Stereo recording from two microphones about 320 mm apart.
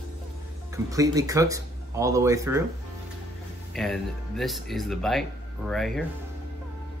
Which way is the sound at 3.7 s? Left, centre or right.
Centre.